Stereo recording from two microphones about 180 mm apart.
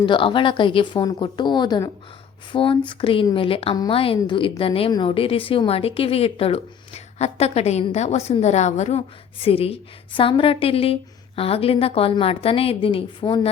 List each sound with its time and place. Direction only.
0.0 s a woman's voice: 30° left (ahead or behind)